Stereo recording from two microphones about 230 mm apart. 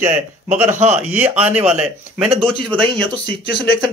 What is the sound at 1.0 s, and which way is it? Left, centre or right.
Speech, centre.